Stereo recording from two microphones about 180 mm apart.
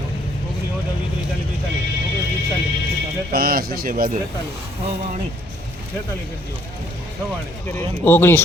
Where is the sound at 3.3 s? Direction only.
55° right (ahead or behind).